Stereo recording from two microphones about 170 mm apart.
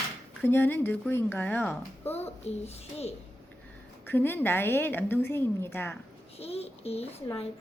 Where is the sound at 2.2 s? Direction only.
40° left (ahead or behind).